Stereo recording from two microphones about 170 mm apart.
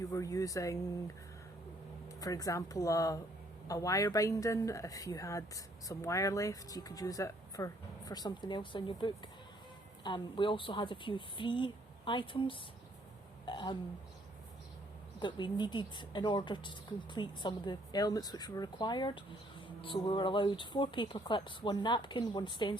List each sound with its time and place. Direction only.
0.0 s speech: 20° left (ahead or behind)
15.2 s speech: 25° left (ahead or behind)